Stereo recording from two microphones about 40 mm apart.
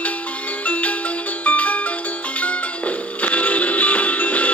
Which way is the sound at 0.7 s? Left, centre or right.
Left.